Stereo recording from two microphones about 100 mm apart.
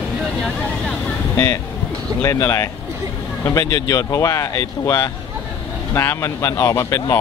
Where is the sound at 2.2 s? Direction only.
30° left (ahead or behind).